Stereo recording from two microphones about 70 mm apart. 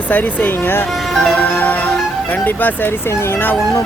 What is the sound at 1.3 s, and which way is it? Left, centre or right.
Speech, left.